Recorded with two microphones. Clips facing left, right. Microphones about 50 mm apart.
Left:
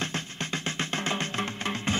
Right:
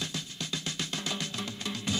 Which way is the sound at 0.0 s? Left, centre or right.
Left.